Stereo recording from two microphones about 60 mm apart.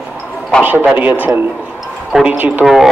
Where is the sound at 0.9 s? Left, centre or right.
Right.